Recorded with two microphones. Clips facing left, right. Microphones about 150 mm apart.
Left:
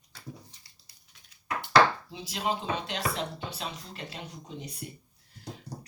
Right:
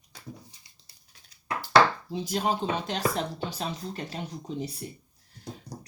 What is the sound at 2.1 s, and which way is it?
Speech, 40° right (ahead or behind).